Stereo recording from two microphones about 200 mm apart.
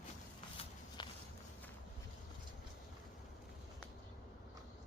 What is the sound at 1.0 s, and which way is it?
Walk, 20° left (ahead or behind).